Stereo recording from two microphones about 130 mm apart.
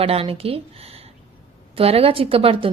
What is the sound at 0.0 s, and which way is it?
Speech, 50° right (ahead or behind).